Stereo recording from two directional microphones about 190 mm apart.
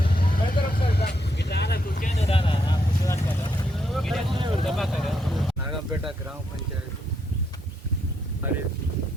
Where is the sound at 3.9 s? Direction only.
Centre (ahead or behind).